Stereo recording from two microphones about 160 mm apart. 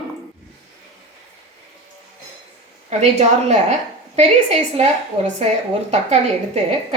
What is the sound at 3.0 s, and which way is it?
A woman's voice, 45° right (ahead or behind).